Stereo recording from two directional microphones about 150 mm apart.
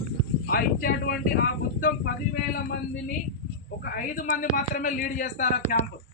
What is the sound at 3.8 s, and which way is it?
A man's voice, 75° left (ahead or behind).